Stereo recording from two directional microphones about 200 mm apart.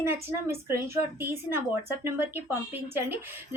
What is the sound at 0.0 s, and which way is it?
A woman's voice, 10° right (ahead or behind).